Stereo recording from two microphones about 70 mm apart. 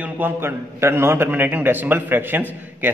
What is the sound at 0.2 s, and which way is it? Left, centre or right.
A man's voice, right.